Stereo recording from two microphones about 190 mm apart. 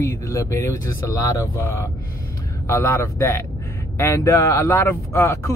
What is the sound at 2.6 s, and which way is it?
Speech, 15° left (ahead or behind).